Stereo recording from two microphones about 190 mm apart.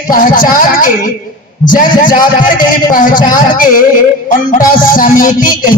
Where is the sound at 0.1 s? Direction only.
45° left (ahead or behind).